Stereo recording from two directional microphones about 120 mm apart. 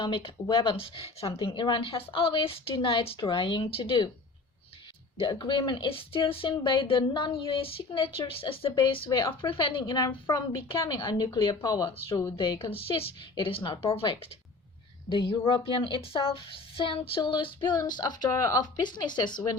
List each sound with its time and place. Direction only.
0.0 s speech: 45° left (ahead or behind)
5.1 s a woman's voice: 40° left (ahead or behind)